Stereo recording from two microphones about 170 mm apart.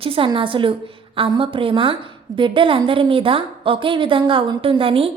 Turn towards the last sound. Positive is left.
turn(degrees=-35)  # may be behind; listen again after turning